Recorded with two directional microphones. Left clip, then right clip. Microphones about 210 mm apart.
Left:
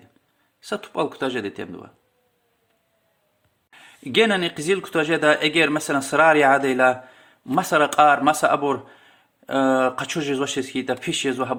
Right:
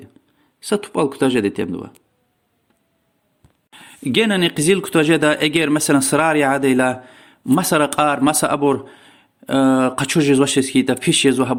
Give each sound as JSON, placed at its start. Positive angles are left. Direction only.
{"t": 0.6, "sound": "speech", "side_deg": -35}
{"t": 3.7, "sound": "speech", "side_deg": -35}